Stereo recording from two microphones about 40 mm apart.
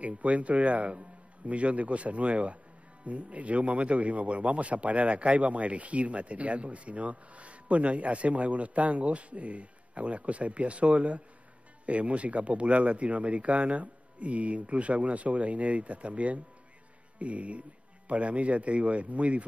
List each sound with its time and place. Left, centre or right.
0.0 s speech: right